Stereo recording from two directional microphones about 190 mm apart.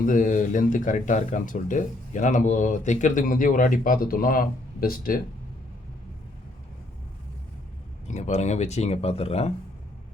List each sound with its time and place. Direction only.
0.0 s speech: 45° left (ahead or behind)
8.0 s speech: 40° left (ahead or behind)